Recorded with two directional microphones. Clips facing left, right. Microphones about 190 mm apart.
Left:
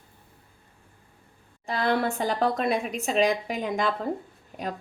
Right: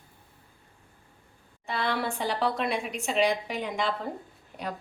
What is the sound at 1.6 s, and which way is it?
A woman's voice, 40° left (ahead or behind).